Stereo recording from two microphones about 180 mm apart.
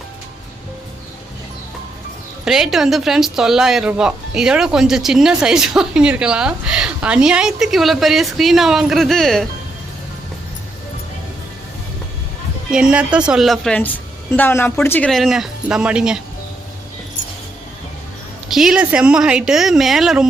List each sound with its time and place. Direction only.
2.4 s speech: centre (ahead or behind)
12.7 s speech: 5° right (ahead or behind)
18.4 s speech: centre (ahead or behind)